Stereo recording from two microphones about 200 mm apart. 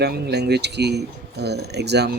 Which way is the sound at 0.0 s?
55° right (ahead or behind).